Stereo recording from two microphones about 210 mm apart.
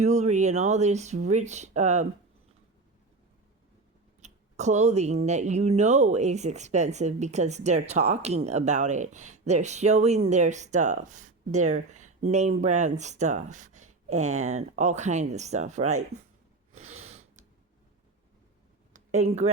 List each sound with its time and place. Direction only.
0.0 s speech: 35° right (ahead or behind)
4.2 s speech: 35° right (ahead or behind)
16.7 s a sound: 30° right (ahead or behind)
18.9 s speech: 30° right (ahead or behind)